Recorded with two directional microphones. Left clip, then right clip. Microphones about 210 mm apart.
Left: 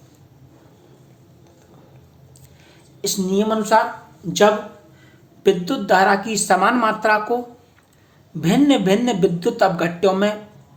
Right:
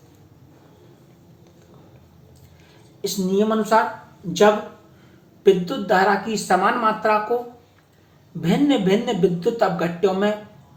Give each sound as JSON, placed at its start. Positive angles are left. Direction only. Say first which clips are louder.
{"t": 3.0, "sound": "a woman's voice", "louder": "left 1 dB", "side_deg": 50}
{"t": 5.4, "sound": "a woman's voice", "louder": "right 1 dB", "side_deg": 50}
{"t": 8.4, "sound": "a woman's voice", "louder": "left 3 dB", "side_deg": 50}